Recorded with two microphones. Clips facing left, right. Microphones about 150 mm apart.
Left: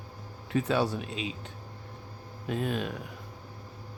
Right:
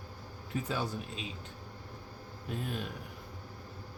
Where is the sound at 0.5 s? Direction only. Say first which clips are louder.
Left 8 dB; 80° left.